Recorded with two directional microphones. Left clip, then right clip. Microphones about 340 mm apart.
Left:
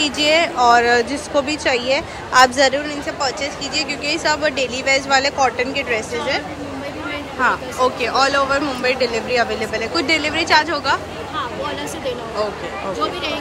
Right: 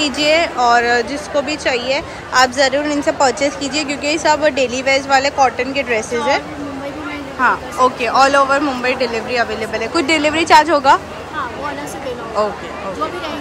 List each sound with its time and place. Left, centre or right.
0.2 s a woman's voice: centre